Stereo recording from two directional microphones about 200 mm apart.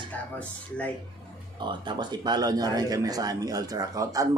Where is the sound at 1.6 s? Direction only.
25° right (ahead or behind).